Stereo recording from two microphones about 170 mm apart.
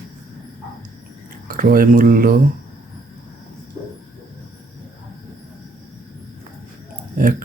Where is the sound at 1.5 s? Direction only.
55° right (ahead or behind).